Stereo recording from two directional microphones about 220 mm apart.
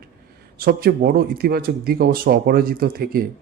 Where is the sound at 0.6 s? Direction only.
45° right (ahead or behind).